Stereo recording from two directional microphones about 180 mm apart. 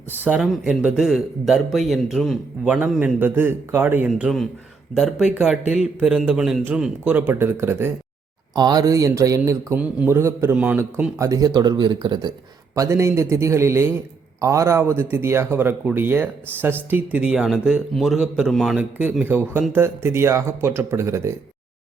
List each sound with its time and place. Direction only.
0.2 s a man's voice: 5° right (ahead or behind)
4.1 s a man's voice: centre (ahead or behind); by 21.3 s 15° right (ahead or behind)